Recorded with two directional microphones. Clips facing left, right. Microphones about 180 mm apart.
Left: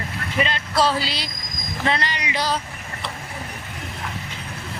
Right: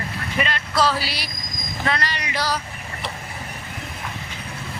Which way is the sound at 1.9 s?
20° left (ahead or behind).